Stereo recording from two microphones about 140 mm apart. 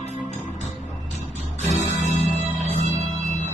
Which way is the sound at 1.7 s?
55° left (ahead or behind).